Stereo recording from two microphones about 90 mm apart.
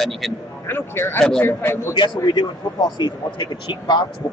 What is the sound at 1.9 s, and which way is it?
A man's voice, 55° left (ahead or behind).